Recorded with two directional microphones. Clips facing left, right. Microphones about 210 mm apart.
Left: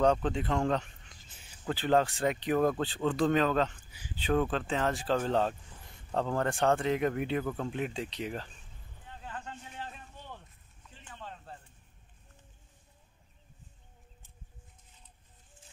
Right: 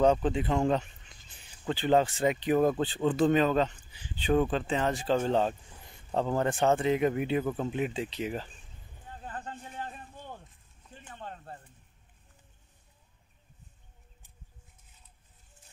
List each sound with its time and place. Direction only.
0.0 s speech: 5° right (ahead or behind)
6.1 s speech: 5° right (ahead or behind)
9.1 s a sound: 40° right (ahead or behind)